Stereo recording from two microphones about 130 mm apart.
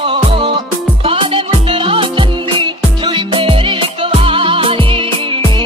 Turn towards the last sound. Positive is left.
turn(degrees=-40)  # may be behind; listen again after turning